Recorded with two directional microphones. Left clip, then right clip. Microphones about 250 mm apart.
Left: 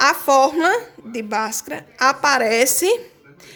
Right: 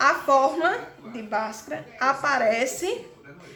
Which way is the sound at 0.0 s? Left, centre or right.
Left.